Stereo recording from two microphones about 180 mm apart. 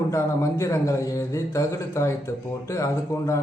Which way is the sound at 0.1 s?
15° left (ahead or behind).